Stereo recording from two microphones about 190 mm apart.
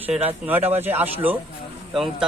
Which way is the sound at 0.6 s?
35° right (ahead or behind).